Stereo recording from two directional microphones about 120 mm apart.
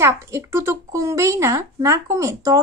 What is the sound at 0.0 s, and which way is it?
Speech, 20° right (ahead or behind).